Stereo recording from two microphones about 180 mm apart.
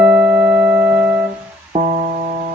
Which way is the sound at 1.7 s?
35° right (ahead or behind).